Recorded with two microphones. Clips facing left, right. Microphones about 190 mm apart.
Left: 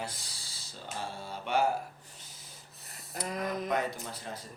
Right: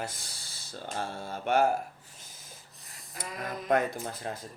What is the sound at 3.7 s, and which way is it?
Speech, 55° right (ahead or behind).